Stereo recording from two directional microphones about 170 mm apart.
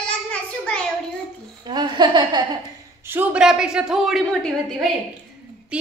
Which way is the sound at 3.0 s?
10° right (ahead or behind).